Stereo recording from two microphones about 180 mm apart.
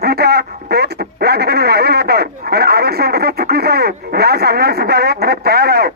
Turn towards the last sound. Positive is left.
turn(degrees=-60)  # may be behind; listen again after turning